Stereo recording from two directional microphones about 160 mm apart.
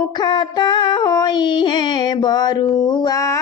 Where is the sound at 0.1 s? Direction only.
30° left (ahead or behind).